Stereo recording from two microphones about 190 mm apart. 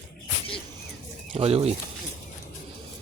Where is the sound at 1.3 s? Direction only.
30° right (ahead or behind).